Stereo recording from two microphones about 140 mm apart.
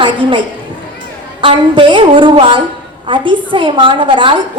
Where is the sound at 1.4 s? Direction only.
35° right (ahead or behind).